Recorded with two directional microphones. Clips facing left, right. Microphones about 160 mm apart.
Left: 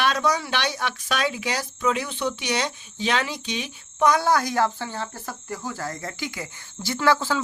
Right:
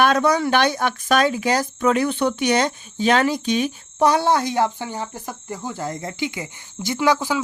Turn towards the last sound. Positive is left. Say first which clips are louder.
# right 2 dB
turn(degrees=-15)  # may be behind; listen again after turning